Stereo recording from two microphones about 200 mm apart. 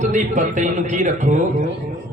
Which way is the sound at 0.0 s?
40° right (ahead or behind).